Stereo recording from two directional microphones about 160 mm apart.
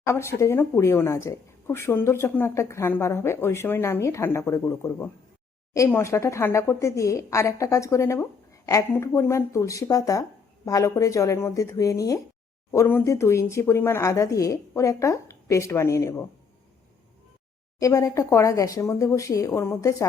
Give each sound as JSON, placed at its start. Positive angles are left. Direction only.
{"t": 0.0, "sound": "speech", "side_deg": 15}
{"t": 17.7, "sound": "speech", "side_deg": 20}